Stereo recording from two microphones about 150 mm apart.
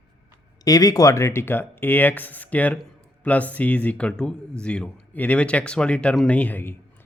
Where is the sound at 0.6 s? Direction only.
25° left (ahead or behind).